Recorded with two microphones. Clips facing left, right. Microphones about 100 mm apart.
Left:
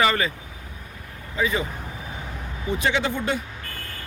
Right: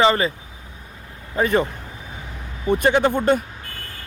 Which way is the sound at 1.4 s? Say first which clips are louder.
Right 6 dB; 55° right (ahead or behind).